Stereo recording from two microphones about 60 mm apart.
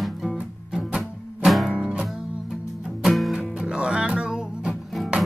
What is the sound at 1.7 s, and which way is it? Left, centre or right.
Music, centre.